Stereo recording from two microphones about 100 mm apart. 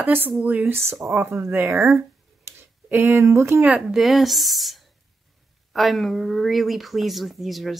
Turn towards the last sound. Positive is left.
turn(degrees=0)  # may be behind; listen again after turning